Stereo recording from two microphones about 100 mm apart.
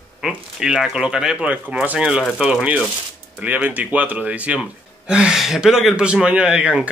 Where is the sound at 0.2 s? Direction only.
5° right (ahead or behind).